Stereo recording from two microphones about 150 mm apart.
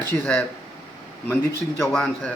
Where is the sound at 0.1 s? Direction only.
15° left (ahead or behind).